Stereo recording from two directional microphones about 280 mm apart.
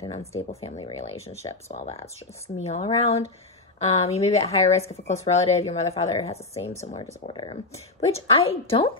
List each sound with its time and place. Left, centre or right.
0.0 s speech: left